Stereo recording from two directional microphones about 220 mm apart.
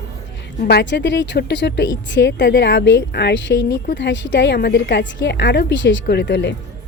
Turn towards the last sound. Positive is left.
turn(degrees=50)  # may be behind; listen again after turning